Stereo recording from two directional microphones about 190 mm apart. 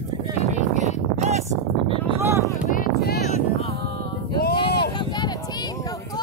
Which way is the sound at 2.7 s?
50° left (ahead or behind).